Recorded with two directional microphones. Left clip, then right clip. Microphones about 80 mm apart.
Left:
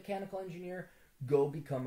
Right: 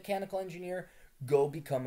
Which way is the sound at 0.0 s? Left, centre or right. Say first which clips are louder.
Right 5 dB; right.